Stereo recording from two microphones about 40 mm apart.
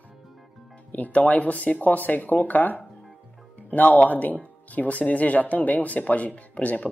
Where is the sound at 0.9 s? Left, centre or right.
Left.